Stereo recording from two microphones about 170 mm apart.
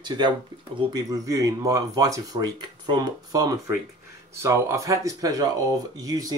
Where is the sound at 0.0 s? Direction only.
25° right (ahead or behind).